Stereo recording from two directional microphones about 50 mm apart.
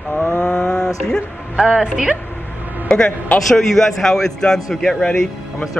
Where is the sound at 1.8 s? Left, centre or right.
Centre.